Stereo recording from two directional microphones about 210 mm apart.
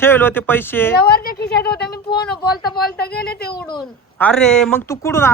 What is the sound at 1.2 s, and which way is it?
Speech, 45° left (ahead or behind).